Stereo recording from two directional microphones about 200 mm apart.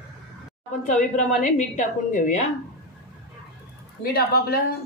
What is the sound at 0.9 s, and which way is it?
A woman's voice, 35° left (ahead or behind).